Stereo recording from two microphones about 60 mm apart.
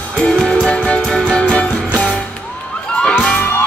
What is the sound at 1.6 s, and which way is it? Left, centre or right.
Music, left.